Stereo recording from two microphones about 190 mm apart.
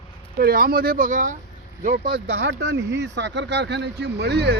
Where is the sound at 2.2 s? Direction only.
65° right (ahead or behind).